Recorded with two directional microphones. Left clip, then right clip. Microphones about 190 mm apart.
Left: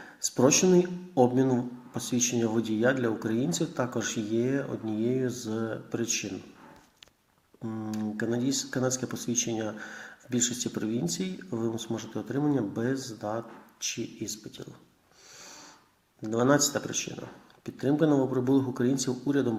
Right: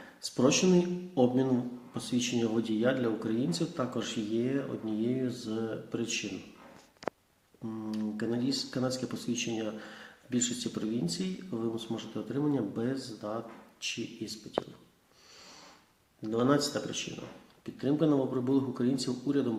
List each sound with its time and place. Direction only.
0.3 s speech: 15° left (ahead or behind)
7.6 s speech: 20° left (ahead or behind)
16.2 s speech: 20° left (ahead or behind)
17.7 s speech: 20° left (ahead or behind)